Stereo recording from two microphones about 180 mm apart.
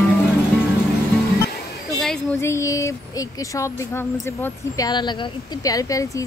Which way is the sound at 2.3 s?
15° left (ahead or behind).